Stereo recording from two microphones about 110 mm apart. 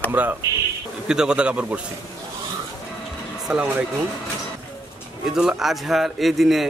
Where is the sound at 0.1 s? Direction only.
15° right (ahead or behind).